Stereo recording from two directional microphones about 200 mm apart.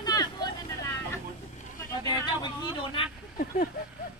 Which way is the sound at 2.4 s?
25° left (ahead or behind).